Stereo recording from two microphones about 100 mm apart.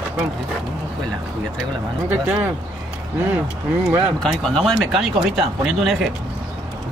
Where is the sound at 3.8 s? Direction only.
20° right (ahead or behind).